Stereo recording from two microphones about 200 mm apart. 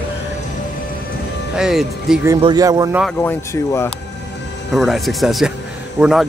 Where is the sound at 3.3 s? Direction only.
15° left (ahead or behind).